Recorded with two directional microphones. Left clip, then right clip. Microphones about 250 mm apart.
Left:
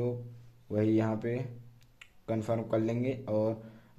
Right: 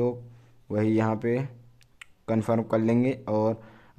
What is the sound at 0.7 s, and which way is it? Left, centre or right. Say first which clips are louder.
Speech: right 4 dB; right.